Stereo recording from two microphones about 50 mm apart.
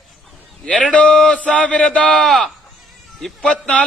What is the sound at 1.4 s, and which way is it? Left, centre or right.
A man's voice, left.